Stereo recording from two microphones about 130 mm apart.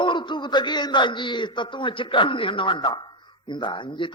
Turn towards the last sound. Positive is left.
turn(degrees=40)  # may be behind; listen again after turning